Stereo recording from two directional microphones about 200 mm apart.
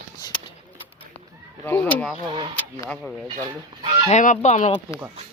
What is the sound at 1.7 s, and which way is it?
Speech, 5° left (ahead or behind).